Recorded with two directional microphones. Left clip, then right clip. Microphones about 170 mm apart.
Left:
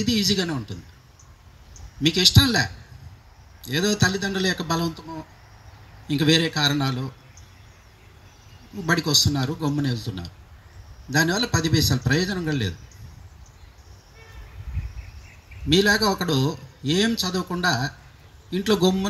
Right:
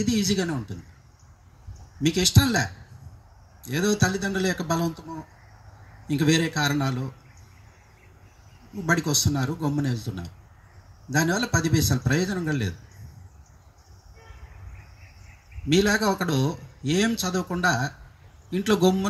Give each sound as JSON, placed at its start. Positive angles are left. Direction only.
{"t": 0.0, "sound": "speech", "side_deg": -20}
{"t": 2.0, "sound": "a man's voice", "side_deg": -20}
{"t": 8.8, "sound": "speech", "side_deg": -20}
{"t": 15.7, "sound": "a man's voice", "side_deg": -20}